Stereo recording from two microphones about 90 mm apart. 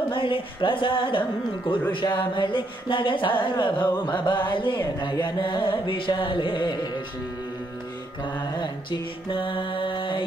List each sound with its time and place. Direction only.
0.1 s speech: 70° left (ahead or behind)
4.0 s carnatic music: 65° left (ahead or behind)
9.3 s speech: 65° left (ahead or behind)